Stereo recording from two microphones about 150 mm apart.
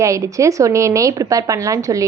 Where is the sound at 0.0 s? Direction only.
20° right (ahead or behind).